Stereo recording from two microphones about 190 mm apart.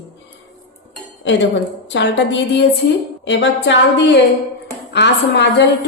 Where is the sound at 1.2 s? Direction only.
70° left (ahead or behind).